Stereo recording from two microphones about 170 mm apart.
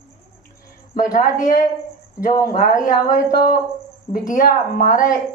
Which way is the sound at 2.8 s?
55° left (ahead or behind).